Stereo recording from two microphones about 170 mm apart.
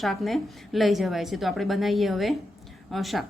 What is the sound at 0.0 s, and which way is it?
A woman's voice, centre (ahead or behind).